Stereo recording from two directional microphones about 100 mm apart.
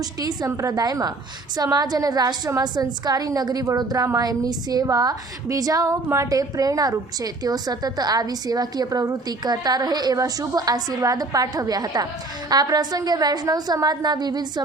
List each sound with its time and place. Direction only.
0.4 s a woman's voice: 35° right (ahead or behind)